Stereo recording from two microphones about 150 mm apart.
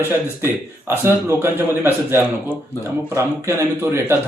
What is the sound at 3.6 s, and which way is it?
Speech, 15° right (ahead or behind).